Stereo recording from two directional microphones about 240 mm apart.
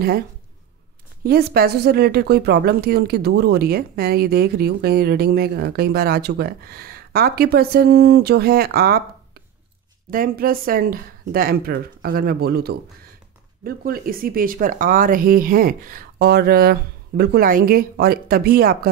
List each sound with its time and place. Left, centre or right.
1.2 s speech: right
10.1 s speech: right